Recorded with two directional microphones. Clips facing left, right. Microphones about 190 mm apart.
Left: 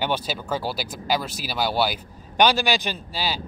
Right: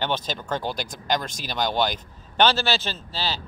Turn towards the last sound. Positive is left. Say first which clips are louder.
# left 2 dB
turn(degrees=10)  # may be behind; listen again after turning